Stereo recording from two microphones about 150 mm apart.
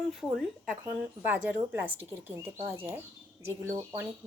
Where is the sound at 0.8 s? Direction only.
10° right (ahead or behind).